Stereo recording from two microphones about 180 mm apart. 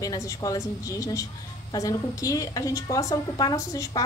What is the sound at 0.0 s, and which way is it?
A woman's voice, 20° left (ahead or behind).